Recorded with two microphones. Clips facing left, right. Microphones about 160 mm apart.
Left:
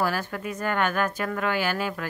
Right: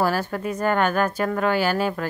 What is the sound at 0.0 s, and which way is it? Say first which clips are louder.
Speech: right 4 dB; 35° right (ahead or behind).